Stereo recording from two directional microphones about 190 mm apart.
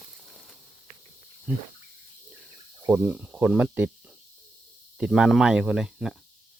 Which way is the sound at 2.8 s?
10° right (ahead or behind).